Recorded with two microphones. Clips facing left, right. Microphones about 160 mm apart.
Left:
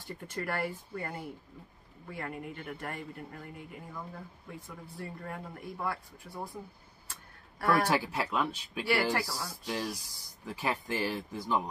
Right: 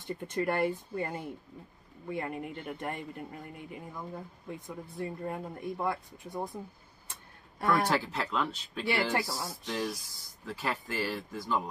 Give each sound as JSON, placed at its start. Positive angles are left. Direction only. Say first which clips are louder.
{"t": 0.0, "sound": "speech", "louder": "right 6 dB", "side_deg": -20}
{"t": 7.6, "sound": "speech", "louder": "even", "side_deg": 10}
{"t": 8.8, "sound": "speech", "louder": "even", "side_deg": -20}
{"t": 10.4, "sound": "speech", "louder": "left 1 dB", "side_deg": 15}